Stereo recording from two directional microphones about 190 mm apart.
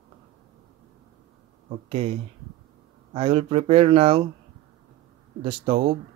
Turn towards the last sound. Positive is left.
turn(degrees=-30)  # may be behind; listen again after turning